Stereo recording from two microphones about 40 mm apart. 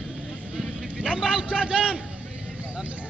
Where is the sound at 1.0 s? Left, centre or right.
Right.